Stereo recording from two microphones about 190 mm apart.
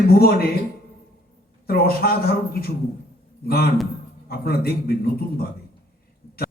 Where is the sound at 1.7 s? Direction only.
55° left (ahead or behind).